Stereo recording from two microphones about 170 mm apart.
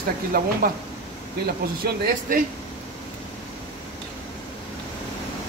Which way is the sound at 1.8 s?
55° right (ahead or behind).